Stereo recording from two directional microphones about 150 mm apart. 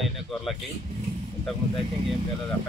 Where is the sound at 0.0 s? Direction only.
Centre (ahead or behind).